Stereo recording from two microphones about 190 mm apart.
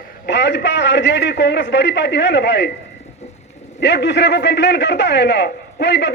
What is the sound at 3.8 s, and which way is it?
A man's voice, 65° left (ahead or behind).